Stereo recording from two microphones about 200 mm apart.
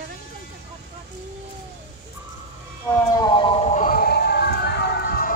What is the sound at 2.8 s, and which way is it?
Siren, 10° left (ahead or behind).